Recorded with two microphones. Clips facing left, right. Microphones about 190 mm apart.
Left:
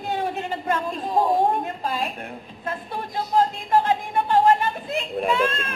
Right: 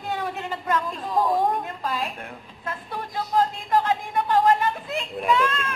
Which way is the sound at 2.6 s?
30° left (ahead or behind).